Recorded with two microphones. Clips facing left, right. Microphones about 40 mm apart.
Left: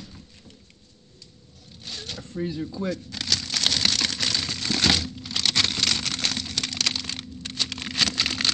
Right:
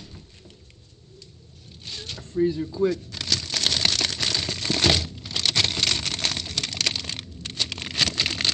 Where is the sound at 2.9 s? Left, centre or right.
Right.